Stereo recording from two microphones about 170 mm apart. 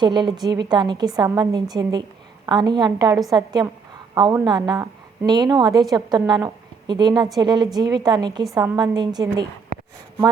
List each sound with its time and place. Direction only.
0.0 s a woman's voice: 25° right (ahead or behind)